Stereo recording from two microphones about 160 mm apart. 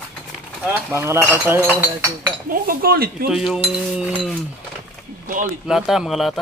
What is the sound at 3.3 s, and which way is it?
Speech, centre (ahead or behind).